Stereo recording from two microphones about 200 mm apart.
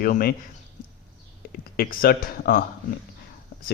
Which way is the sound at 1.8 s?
50° left (ahead or behind).